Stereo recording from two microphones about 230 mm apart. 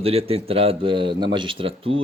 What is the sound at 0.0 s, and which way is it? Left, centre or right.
Speech, right.